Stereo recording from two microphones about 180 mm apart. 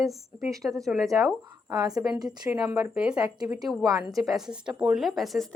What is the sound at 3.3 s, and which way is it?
Speech, 20° right (ahead or behind).